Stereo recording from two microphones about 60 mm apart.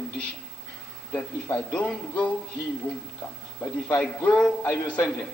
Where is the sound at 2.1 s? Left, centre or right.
Left.